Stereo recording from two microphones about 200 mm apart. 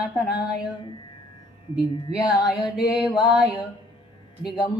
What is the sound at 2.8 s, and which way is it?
Mantra, 5° right (ahead or behind).